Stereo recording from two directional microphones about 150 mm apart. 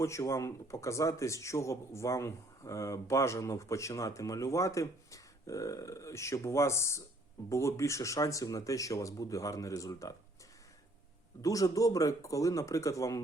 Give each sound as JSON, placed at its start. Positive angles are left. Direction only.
{"t": 0.0, "sound": "speech", "side_deg": 20}
{"t": 11.4, "sound": "speech", "side_deg": 20}